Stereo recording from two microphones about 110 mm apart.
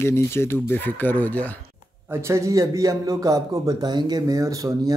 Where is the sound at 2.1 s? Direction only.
25° right (ahead or behind).